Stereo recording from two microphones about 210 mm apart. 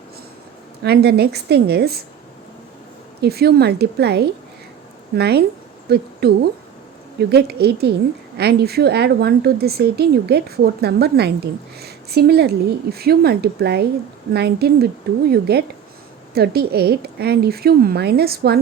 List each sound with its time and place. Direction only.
0.8 s a woman's voice: 50° right (ahead or behind)
3.2 s a woman's voice: 50° right (ahead or behind)